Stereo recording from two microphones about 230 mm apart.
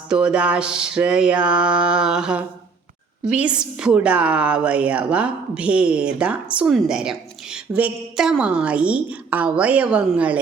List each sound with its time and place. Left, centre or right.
0.1 s a woman's voice: centre